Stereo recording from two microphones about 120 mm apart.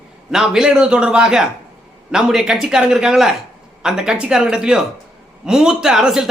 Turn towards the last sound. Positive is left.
turn(degrees=-5)  # may be behind; listen again after turning